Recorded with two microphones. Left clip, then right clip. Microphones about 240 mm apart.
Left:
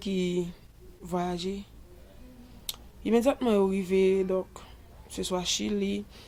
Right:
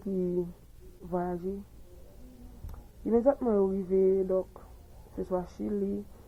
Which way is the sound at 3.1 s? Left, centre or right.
Left.